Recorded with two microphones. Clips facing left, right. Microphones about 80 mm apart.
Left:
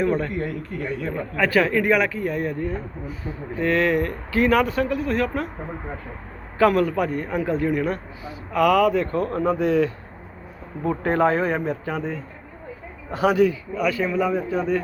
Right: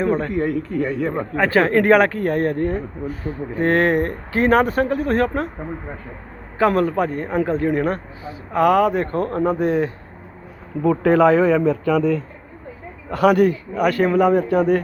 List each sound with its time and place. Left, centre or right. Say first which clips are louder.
0.0 s a man's voice: right 3 dB; right
1.7 s speech: right 6 dB; right
6.6 s a man's voice: right 1 dB; right
10.8 s a man's voice: right 6 dB; right
13.1 s a man's voice: right 4 dB; right